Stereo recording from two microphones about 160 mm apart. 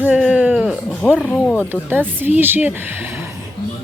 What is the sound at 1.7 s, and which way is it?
Speech, 10° right (ahead or behind).